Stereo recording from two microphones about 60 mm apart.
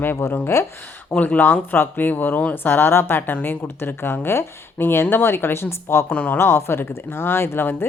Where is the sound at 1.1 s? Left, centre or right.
Left.